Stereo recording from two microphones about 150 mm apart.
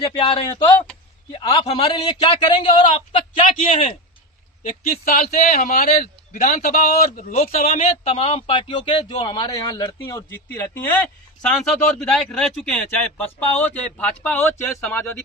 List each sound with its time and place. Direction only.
0.0 s a man's voice: 35° left (ahead or behind)
2.0 s a man's voice: 30° left (ahead or behind)
5.0 s a man's voice: 50° left (ahead or behind); by 15.1 s 10° left (ahead or behind)